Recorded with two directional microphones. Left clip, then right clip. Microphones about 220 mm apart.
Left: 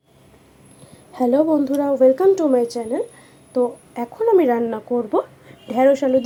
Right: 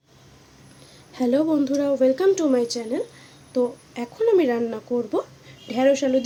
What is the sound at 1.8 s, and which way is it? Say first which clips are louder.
Speech: left 6 dB; 15° right (ahead or behind).